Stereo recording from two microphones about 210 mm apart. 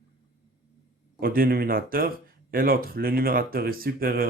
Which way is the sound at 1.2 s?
45° right (ahead or behind).